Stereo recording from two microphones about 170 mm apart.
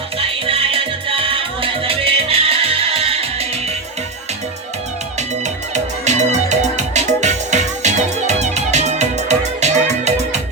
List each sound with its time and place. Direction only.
0.2 s music: 35° right (ahead or behind)
5.7 s music: 45° right (ahead or behind)